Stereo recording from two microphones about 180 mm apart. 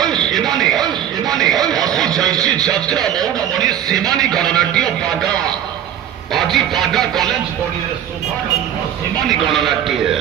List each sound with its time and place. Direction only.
0.0 s music: 5° left (ahead or behind)
0.5 s speech: 5° left (ahead or behind)
6.3 s music: centre (ahead or behind)
9.3 s music: centre (ahead or behind)